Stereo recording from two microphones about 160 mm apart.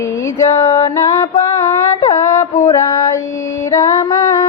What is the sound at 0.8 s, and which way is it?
Female singing, 20° left (ahead or behind).